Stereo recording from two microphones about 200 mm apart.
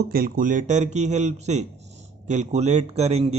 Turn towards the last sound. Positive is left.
turn(degrees=-30)  # may be behind; listen again after turning